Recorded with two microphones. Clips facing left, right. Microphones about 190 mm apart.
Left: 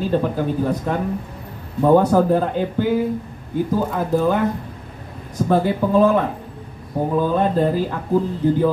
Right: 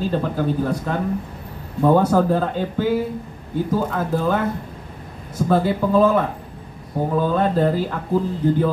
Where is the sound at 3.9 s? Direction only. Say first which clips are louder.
Left 2 dB; 10° left (ahead or behind).